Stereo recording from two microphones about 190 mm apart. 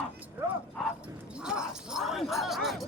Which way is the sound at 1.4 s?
5° right (ahead or behind).